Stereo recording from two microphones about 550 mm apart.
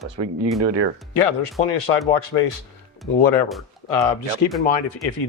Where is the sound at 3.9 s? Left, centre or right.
Left.